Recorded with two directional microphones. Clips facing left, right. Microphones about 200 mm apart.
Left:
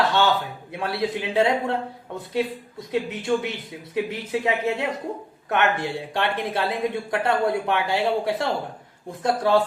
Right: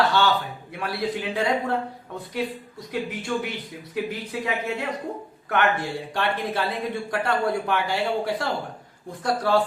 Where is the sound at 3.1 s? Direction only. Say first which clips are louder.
Left 4 dB; 25° left (ahead or behind).